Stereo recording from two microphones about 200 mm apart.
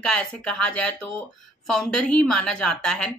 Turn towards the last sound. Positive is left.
turn(degrees=5)  # may be behind; listen again after turning